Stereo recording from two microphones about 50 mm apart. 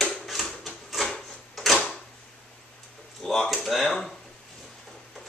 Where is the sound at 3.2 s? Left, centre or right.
Centre.